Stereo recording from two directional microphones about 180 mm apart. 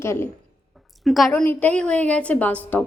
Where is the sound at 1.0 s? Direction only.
Centre (ahead or behind).